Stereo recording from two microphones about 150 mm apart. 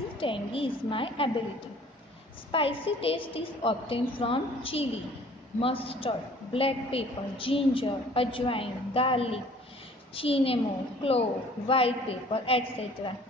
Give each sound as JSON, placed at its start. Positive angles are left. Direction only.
{"t": 0.2, "sound": "a woman's voice", "side_deg": 35}
{"t": 2.5, "sound": "a woman's voice", "side_deg": 35}